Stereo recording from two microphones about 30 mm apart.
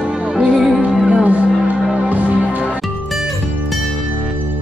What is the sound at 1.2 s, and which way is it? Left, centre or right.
Music, right.